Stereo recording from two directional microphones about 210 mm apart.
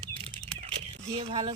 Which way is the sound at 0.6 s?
30° right (ahead or behind).